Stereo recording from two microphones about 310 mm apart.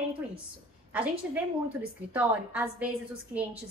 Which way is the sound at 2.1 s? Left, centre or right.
Centre.